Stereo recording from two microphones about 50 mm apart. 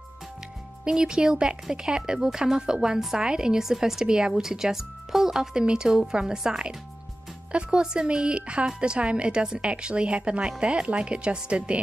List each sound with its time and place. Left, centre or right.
0.8 s a woman's voice: centre